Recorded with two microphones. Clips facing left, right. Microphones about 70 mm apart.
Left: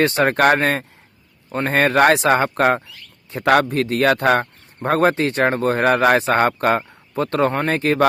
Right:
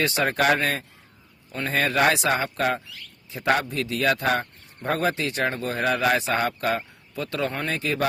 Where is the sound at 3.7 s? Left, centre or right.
Left.